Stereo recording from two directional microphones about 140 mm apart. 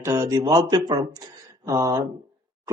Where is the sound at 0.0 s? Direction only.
25° right (ahead or behind).